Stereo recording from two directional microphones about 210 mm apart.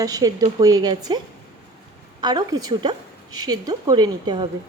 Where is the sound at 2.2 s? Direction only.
20° right (ahead or behind).